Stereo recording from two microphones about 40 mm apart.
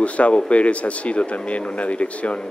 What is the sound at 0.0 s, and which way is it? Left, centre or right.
Speech, left.